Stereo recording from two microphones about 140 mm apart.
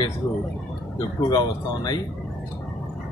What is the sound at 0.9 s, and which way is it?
Speech, 30° left (ahead or behind).